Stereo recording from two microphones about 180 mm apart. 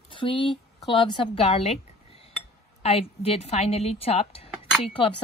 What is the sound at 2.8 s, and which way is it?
Speech, 35° left (ahead or behind).